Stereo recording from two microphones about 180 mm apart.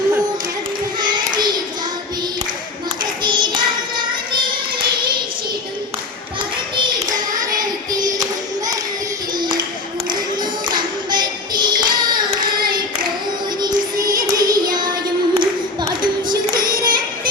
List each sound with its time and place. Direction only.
3.0 s child singing: 25° right (ahead or behind)
7.3 s child singing: 20° right (ahead or behind)
9.4 s a sound: 25° right (ahead or behind)
10.7 s clapping: 25° right (ahead or behind)
13.6 s music: 20° right (ahead or behind)
15.4 s clapping: 25° right (ahead or behind)
16.6 s singing: 25° right (ahead or behind)